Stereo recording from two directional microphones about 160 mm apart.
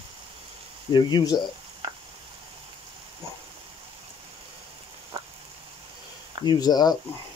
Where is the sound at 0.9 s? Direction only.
25° left (ahead or behind).